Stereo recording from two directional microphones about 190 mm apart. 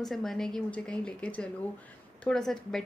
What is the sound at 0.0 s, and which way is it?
Speech, centre (ahead or behind).